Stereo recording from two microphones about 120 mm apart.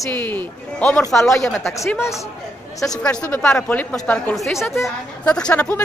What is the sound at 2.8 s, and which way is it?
Speech, 10° left (ahead or behind).